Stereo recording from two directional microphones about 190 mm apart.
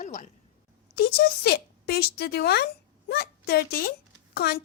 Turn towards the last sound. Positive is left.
turn(degrees=55)  # may be behind; listen again after turning